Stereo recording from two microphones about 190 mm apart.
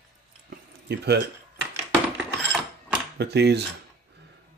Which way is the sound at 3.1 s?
60° right (ahead or behind).